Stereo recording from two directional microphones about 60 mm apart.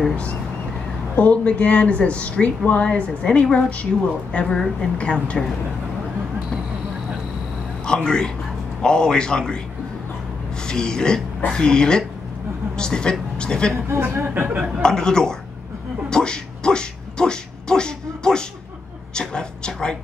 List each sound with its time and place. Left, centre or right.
0.1 s speech: centre
7.8 s a man's voice: centre
10.7 s a woman's voice: centre
13.8 s a woman's voice: right
14.8 s speech: centre